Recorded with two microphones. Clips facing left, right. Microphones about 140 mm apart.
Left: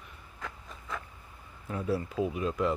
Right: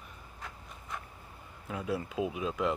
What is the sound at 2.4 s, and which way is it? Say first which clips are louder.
Speech: left 3 dB; 5° right (ahead or behind).